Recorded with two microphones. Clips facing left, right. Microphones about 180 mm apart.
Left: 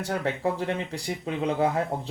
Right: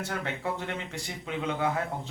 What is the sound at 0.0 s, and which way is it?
Speech, 35° left (ahead or behind).